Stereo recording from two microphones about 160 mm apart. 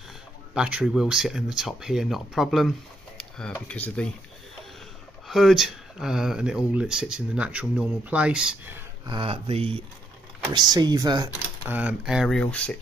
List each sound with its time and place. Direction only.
0.6 s speech: 5° right (ahead or behind)
3.2 s a sound: 5° left (ahead or behind)
3.6 s speech: 10° left (ahead or behind)
5.3 s speech: centre (ahead or behind)
9.0 s speech: 30° right (ahead or behind)
11.7 s speech: 5° right (ahead or behind)
12.4 s speech: 10° left (ahead or behind)